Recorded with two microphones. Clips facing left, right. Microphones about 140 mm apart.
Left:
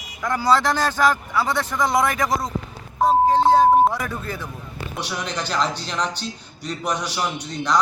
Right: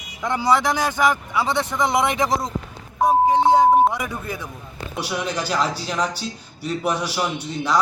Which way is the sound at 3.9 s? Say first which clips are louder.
Even; 15° right (ahead or behind).